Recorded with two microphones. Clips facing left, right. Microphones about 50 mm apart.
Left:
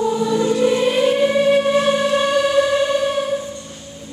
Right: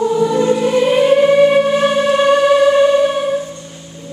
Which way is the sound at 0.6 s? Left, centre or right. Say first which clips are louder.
Right 3 dB; centre.